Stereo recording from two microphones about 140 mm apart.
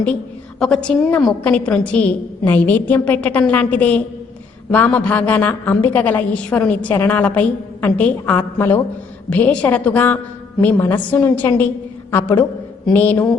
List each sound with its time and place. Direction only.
0.6 s a woman's voice: 5° left (ahead or behind)